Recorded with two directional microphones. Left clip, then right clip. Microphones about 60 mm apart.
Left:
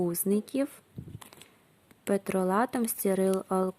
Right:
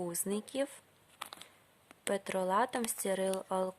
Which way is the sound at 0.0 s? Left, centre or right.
Left.